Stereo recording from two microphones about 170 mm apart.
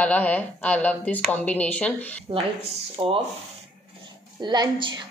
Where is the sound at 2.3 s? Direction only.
30° right (ahead or behind).